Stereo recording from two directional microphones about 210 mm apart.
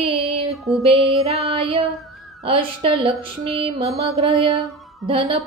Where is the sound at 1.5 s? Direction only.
30° right (ahead or behind).